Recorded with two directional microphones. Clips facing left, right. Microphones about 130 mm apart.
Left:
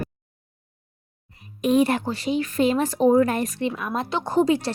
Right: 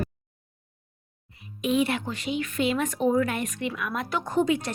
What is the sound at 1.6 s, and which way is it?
Speech, 40° left (ahead or behind).